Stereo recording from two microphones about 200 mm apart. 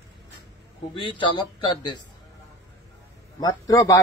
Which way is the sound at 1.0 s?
25° left (ahead or behind).